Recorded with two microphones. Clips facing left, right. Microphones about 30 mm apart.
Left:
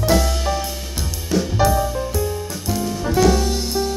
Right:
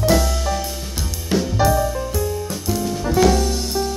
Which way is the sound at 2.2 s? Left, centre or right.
Centre.